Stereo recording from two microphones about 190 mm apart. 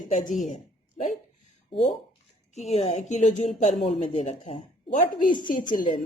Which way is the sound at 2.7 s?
35° left (ahead or behind).